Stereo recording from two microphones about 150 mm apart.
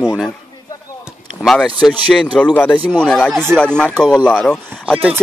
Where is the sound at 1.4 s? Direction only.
Centre (ahead or behind).